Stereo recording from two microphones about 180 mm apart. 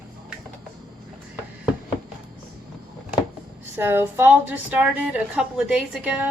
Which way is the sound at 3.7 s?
10° right (ahead or behind).